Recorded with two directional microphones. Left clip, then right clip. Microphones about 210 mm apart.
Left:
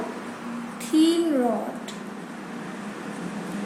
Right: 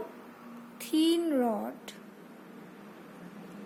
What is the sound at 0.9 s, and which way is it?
Speech, 50° right (ahead or behind).